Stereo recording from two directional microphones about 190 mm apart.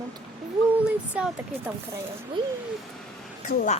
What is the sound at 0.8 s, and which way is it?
Speech, 5° right (ahead or behind).